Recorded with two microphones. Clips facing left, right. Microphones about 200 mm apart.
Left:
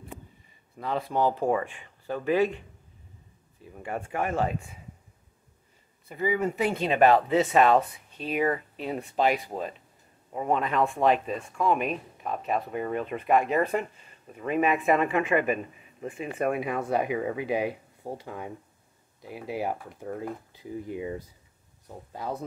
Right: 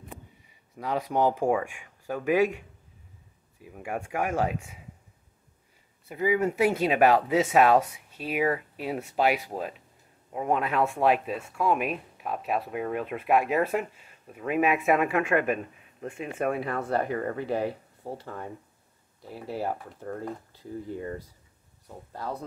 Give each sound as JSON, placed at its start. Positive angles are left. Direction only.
{"t": 0.5, "sound": "speech", "side_deg": -10}
{"t": 3.6, "sound": "speech", "side_deg": -10}
{"t": 6.0, "sound": "speech", "side_deg": -10}
{"t": 16.5, "sound": "speech", "side_deg": 15}